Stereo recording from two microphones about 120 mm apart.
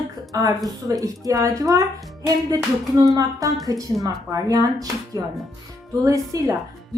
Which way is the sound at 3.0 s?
30° right (ahead or behind).